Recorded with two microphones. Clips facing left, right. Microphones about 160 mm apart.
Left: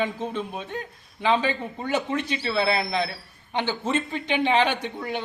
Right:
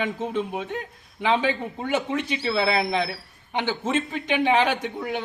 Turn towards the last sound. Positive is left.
turn(degrees=-5)  # may be behind; listen again after turning